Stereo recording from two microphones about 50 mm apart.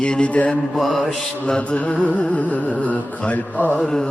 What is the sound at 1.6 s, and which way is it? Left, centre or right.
Mantra, left.